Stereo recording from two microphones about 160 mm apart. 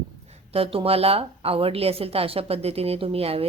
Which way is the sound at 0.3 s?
35° right (ahead or behind).